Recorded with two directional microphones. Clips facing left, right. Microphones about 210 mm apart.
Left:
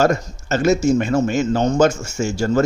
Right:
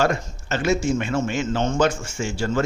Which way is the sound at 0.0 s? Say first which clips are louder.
Left 5 dB; 40° left (ahead or behind).